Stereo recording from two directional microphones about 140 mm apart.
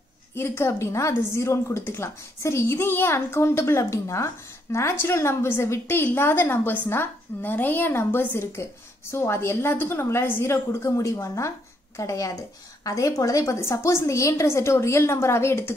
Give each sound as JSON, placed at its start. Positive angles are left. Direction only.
{"t": 0.4, "sound": "a woman's voice", "side_deg": 15}